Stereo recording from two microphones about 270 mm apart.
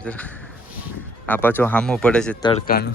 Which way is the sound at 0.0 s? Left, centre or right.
Centre.